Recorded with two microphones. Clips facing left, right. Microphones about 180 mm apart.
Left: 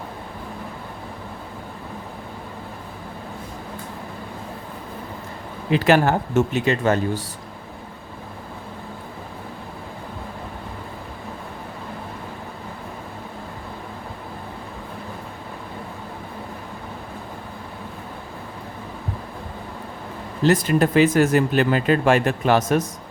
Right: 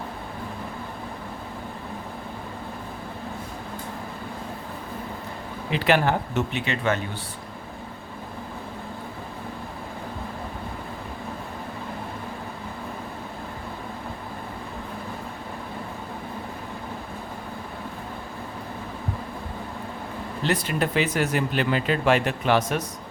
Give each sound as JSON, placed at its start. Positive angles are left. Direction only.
{"t": 5.7, "sound": "speech", "side_deg": 45}
{"t": 20.4, "sound": "speech", "side_deg": 45}